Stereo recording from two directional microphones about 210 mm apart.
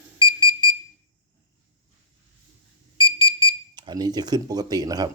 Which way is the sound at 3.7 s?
20° right (ahead or behind).